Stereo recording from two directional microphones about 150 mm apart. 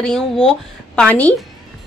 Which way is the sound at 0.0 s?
5° left (ahead or behind).